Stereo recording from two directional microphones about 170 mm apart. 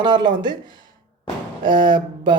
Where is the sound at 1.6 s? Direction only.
30° right (ahead or behind).